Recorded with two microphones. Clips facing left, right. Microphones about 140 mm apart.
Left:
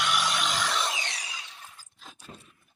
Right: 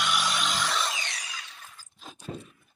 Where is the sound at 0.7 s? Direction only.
15° left (ahead or behind).